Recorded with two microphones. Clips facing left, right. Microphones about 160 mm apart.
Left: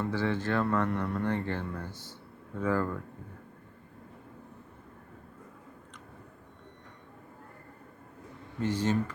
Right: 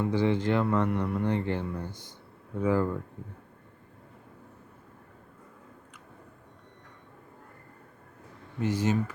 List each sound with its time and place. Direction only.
0.0 s speech: 15° right (ahead or behind)
8.5 s speech: 10° right (ahead or behind)